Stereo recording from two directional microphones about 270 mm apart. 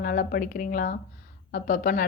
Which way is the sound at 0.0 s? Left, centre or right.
Left.